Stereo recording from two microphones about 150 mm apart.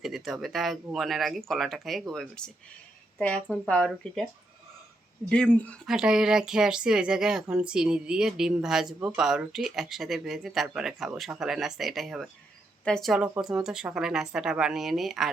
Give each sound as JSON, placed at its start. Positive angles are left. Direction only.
{"t": 0.0, "sound": "a woman's voice", "side_deg": 0}
{"t": 5.3, "sound": "a woman's voice", "side_deg": 5}